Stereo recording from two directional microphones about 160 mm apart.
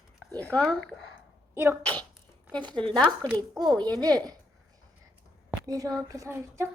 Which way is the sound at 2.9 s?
5° left (ahead or behind).